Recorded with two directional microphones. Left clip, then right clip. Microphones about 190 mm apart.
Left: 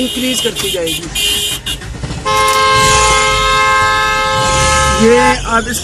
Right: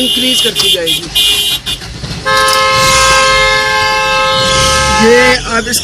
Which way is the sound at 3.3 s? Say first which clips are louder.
Right 2 dB; 30° right (ahead or behind).